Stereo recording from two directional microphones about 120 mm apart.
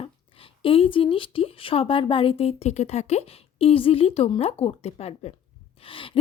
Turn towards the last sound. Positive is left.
turn(degrees=50)  # may be behind; listen again after turning